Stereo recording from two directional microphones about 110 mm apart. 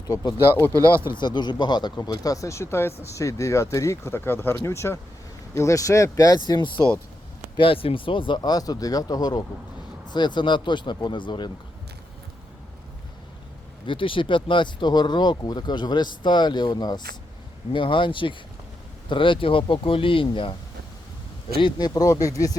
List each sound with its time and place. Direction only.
0.1 s speech: 30° left (ahead or behind)
0.7 s speech: 25° right (ahead or behind)
1.1 s speech: 45° left (ahead or behind)
13.8 s speech: 50° left (ahead or behind)
21.6 s speech: 40° left (ahead or behind)